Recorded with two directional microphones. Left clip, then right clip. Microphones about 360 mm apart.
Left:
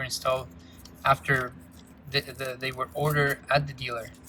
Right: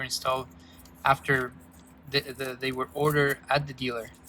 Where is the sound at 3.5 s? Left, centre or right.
Centre.